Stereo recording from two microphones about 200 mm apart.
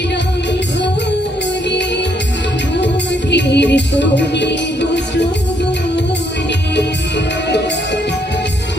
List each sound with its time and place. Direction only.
3.3 s music: 60° left (ahead or behind)